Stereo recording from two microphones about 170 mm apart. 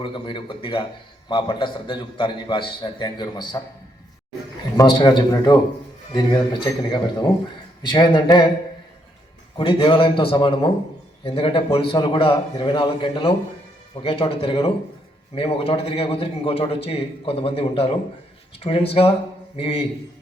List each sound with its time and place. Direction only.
0.0 s a man's voice: 30° left (ahead or behind)
4.8 s a man's voice: 25° left (ahead or behind)
9.6 s a man's voice: 30° left (ahead or behind)